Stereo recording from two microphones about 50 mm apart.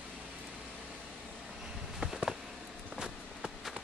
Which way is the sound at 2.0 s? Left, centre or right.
Centre.